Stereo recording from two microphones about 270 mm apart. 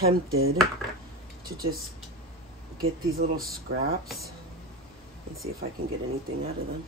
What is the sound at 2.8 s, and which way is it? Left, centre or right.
Speech, right.